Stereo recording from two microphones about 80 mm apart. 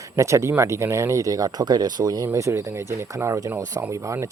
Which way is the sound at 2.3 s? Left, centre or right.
Right.